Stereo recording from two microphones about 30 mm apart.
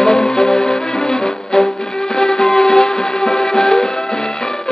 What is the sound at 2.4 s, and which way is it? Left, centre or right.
Music, left.